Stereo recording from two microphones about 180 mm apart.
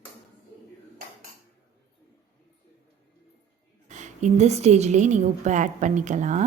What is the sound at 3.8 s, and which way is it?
A woman's voice, 40° right (ahead or behind).